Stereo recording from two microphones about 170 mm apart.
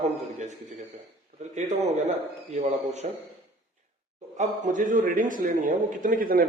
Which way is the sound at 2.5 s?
40° right (ahead or behind).